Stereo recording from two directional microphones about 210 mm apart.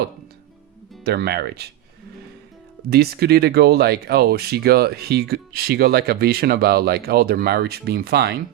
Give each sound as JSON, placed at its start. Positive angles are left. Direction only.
{"t": 1.0, "sound": "speech", "side_deg": -50}
{"t": 2.9, "sound": "speech", "side_deg": -50}